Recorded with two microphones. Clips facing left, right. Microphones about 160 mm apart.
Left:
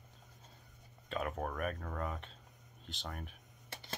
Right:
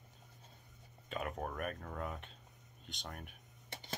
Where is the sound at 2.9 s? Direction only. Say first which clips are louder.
Left 3 dB; centre (ahead or behind).